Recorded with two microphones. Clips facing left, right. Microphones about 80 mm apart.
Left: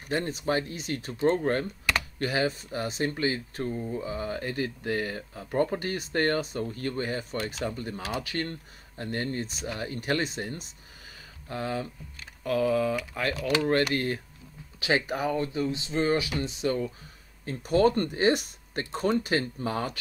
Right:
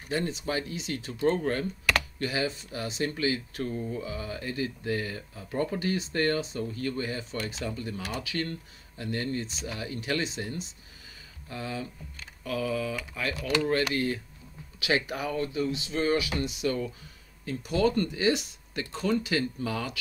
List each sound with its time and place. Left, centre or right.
0.1 s speech: left
3.6 s speech: left
14.8 s speech: left